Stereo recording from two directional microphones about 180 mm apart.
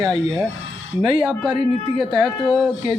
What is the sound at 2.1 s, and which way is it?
Speech, 5° left (ahead or behind).